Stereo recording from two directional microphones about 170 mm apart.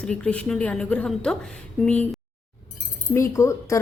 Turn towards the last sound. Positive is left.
turn(degrees=15)  # may be behind; listen again after turning